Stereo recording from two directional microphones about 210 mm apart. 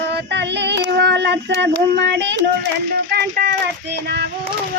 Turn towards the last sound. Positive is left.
turn(degrees=-50)  # may be behind; listen again after turning